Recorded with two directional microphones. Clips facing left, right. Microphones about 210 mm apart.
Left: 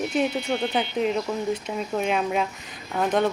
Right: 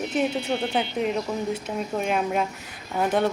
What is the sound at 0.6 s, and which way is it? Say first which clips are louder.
A woman's voice: left 1 dB; 15° right (ahead or behind).